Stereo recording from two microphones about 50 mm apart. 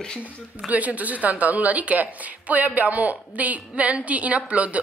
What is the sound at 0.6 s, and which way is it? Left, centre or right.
A woman's voice, right.